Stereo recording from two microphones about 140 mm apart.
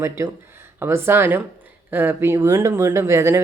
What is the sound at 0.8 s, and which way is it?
Speech, 15° right (ahead or behind).